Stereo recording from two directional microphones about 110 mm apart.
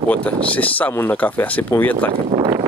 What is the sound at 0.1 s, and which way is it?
Speech, 10° left (ahead or behind).